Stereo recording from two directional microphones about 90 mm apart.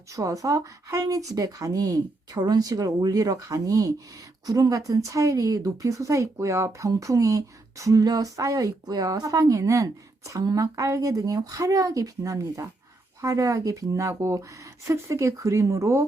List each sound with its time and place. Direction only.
0.1 s speech: 40° right (ahead or behind)